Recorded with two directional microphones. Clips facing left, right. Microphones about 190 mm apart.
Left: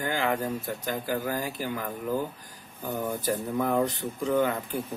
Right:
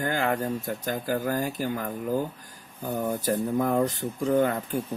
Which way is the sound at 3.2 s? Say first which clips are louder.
Right 3 dB; 45° right (ahead or behind).